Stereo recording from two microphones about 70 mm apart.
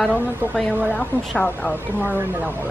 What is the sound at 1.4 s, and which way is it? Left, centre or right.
Speech, centre.